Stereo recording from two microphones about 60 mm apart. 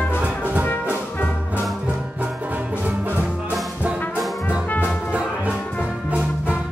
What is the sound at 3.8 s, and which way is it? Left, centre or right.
Brass instrument, right.